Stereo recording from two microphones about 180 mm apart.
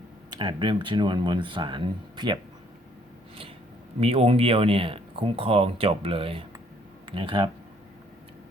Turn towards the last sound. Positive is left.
turn(degrees=-30)  # may be behind; listen again after turning